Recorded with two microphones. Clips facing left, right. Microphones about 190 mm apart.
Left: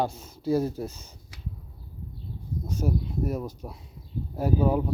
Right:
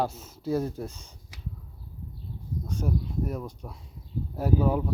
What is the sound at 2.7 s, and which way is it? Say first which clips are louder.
Speech: left 2 dB; 5° left (ahead or behind).